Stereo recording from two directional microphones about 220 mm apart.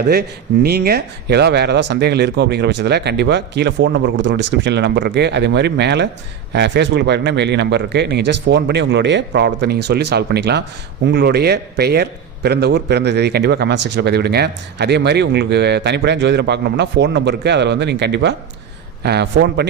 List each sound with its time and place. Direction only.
0.1 s speech: 45° right (ahead or behind)